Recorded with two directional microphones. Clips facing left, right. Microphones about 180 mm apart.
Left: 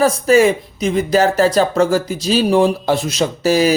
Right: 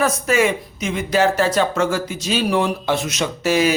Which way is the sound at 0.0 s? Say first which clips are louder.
Left 6 dB; 35° left (ahead or behind).